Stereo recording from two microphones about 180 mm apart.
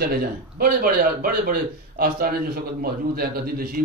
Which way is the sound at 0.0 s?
55° right (ahead or behind).